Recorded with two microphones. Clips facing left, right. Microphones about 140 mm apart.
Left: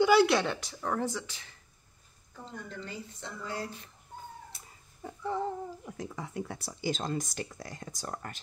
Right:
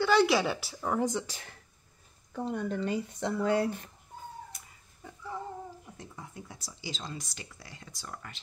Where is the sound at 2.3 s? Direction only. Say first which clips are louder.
Right 11 dB; 70° right (ahead or behind).